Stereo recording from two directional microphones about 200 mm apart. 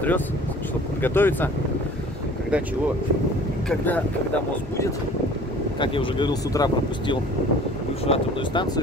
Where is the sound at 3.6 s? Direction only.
10° left (ahead or behind).